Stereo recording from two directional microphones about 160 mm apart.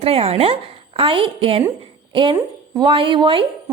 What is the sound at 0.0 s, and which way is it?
A woman's voice, 40° right (ahead or behind).